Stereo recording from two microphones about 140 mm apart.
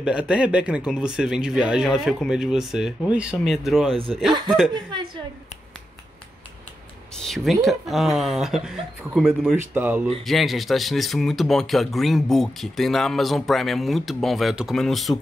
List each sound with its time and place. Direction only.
0.0 s speech: 10° right (ahead or behind)
7.2 s speech: centre (ahead or behind)
9.8 s speech: 15° right (ahead or behind)
10.2 s speech: centre (ahead or behind)